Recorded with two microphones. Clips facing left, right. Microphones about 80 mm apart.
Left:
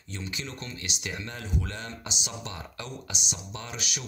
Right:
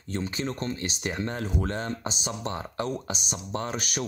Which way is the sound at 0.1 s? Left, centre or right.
Right.